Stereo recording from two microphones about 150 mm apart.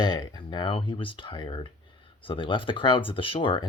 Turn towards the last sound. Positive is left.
turn(degrees=35)  # may be behind; listen again after turning